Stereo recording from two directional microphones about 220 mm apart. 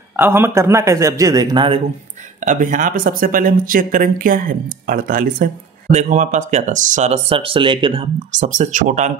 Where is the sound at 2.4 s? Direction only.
35° right (ahead or behind).